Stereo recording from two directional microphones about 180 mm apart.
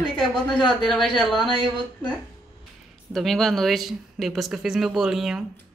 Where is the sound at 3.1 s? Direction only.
Centre (ahead or behind).